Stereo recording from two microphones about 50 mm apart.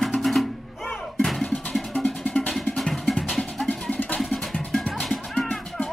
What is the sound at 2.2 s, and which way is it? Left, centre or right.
Music, left.